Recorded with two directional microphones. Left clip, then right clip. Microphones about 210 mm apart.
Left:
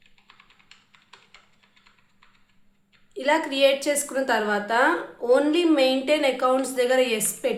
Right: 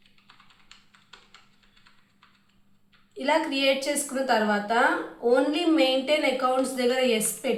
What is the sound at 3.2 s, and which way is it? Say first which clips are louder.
Speech: left 4 dB; 50° left (ahead or behind).